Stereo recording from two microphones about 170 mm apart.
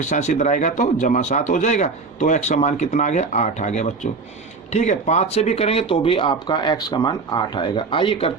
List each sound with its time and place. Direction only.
0.0 s speech: 45° left (ahead or behind)